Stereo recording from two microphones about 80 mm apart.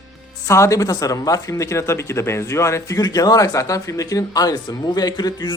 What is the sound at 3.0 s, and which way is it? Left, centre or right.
A man's voice, left.